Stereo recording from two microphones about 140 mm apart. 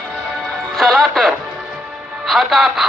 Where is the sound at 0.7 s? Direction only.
Centre (ahead or behind).